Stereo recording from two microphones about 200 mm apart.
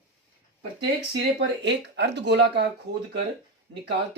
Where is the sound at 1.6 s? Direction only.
60° right (ahead or behind).